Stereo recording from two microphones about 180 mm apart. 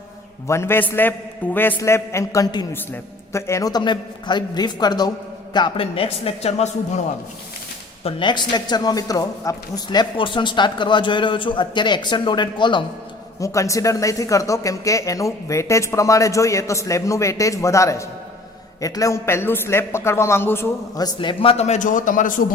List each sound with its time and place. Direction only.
0.4 s a man's voice: 15° left (ahead or behind); by 7.0 s 35° left (ahead or behind)
8.0 s speech: 25° left (ahead or behind); by 22.4 s 45° left (ahead or behind)